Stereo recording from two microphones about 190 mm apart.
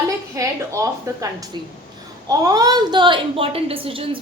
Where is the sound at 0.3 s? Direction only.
15° right (ahead or behind).